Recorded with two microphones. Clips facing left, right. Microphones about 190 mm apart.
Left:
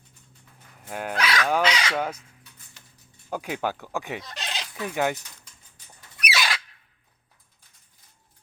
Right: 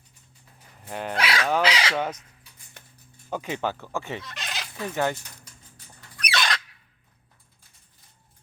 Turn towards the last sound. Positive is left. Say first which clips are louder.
# even
turn(degrees=5)  # may be behind; listen again after turning